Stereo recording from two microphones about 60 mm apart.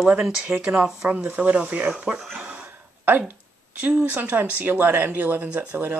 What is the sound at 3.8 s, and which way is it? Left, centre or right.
Speech, right.